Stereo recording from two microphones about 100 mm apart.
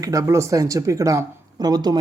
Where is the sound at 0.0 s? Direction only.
35° right (ahead or behind).